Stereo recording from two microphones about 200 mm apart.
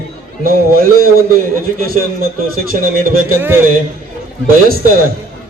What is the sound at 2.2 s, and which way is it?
A man's voice, 45° right (ahead or behind).